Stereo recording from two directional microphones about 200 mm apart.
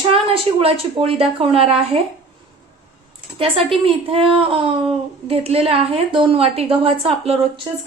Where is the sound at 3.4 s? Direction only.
30° right (ahead or behind).